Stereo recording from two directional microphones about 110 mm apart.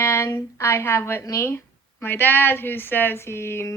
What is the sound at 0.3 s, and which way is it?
A woman's voice, 30° left (ahead or behind).